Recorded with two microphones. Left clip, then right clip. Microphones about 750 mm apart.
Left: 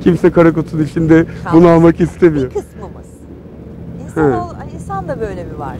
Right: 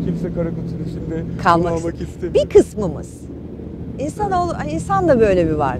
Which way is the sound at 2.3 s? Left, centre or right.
Right.